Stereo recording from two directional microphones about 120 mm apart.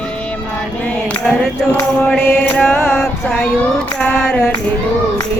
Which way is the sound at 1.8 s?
15° left (ahead or behind).